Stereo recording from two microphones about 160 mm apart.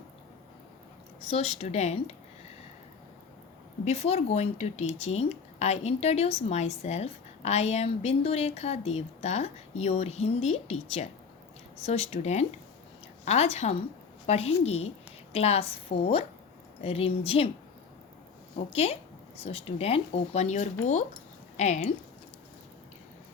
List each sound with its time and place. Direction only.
1.2 s speech: 40° left (ahead or behind)
3.8 s a woman's voice: 40° left (ahead or behind)
18.7 s a woman's voice: 40° left (ahead or behind)